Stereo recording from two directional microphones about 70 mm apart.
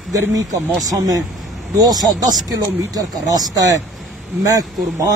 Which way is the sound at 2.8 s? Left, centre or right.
Right.